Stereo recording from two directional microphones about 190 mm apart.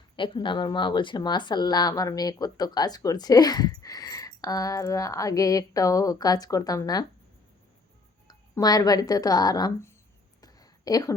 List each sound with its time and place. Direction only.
0.2 s speech: 25° left (ahead or behind)
8.3 s speech: 20° left (ahead or behind)
10.4 s a sound: 20° left (ahead or behind)